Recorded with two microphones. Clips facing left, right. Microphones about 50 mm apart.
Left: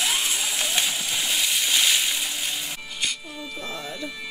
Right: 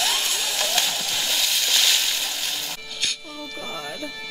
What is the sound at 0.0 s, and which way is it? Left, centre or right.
Splash, centre.